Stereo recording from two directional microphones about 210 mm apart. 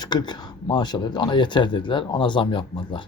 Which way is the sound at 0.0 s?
20° left (ahead or behind).